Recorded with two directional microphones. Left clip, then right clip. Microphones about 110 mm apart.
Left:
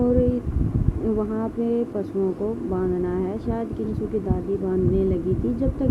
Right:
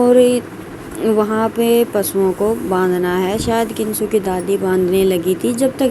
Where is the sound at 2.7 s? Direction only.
45° right (ahead or behind).